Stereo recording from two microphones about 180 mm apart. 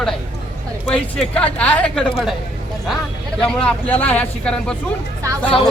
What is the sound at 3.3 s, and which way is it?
Speech, 5° left (ahead or behind).